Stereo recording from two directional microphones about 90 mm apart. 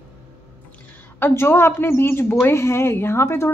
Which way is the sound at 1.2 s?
25° left (ahead or behind).